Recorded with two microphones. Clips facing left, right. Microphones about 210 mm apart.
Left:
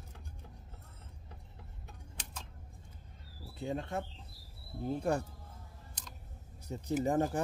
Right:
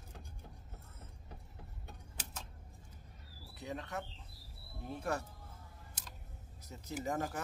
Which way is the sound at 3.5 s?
30° left (ahead or behind).